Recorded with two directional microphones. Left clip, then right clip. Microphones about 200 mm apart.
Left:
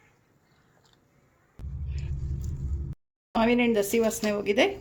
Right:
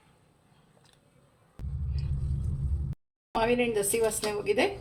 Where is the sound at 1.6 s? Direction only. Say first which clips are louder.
Right 2 dB; centre (ahead or behind).